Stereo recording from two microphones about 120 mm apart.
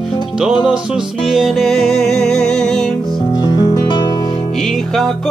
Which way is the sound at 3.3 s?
35° left (ahead or behind).